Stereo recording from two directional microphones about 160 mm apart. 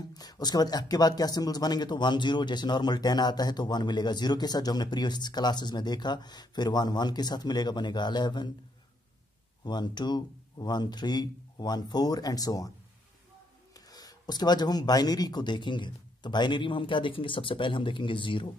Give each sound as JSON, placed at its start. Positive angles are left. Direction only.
{"t": 0.1, "sound": "speech", "side_deg": 25}
{"t": 9.6, "sound": "speech", "side_deg": 25}
{"t": 13.7, "sound": "speech", "side_deg": 25}